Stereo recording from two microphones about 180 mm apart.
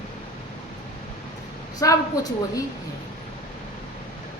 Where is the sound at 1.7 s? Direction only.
20° left (ahead or behind).